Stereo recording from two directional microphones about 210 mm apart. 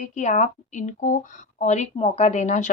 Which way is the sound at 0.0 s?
35° left (ahead or behind).